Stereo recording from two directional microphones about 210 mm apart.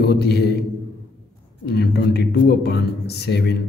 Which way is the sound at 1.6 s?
50° left (ahead or behind).